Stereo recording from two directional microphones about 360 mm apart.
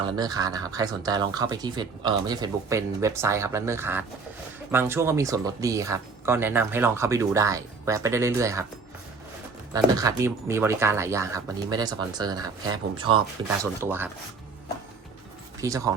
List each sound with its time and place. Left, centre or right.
0.0 s speech: centre
9.7 s speech: centre
15.6 s speech: centre